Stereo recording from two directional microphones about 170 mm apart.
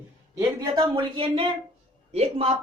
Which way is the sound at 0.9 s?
30° right (ahead or behind).